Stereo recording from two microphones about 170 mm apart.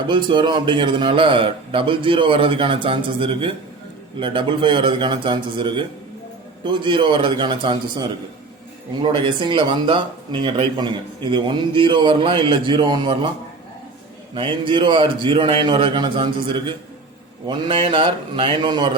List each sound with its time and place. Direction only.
0.1 s a man's voice: 30° right (ahead or behind)
14.3 s speech: 30° right (ahead or behind)